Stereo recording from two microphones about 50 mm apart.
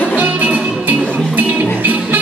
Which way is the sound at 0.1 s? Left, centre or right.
Right.